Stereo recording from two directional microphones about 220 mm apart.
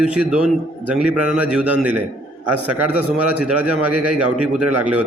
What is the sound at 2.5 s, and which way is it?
Speech, 90° right.